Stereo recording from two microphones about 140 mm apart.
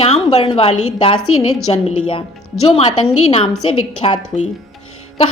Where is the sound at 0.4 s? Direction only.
45° left (ahead or behind).